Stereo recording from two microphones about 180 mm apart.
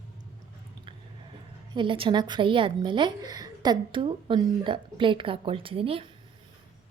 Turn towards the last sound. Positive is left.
turn(degrees=-30)  # may be behind; listen again after turning